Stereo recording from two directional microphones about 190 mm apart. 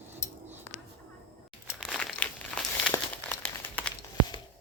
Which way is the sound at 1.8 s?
Centre (ahead or behind).